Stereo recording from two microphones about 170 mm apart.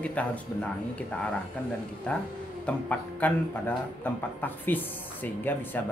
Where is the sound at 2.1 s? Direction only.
5° left (ahead or behind).